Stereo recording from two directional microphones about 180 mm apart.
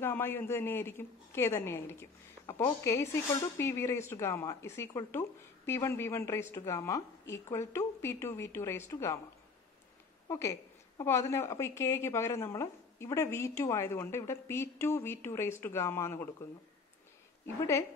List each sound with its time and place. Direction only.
0.0 s a woman's voice: 10° left (ahead or behind)
10.2 s a woman's voice: 15° left (ahead or behind)